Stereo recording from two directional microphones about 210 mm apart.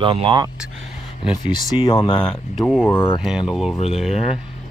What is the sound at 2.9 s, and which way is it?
Speech, 20° left (ahead or behind).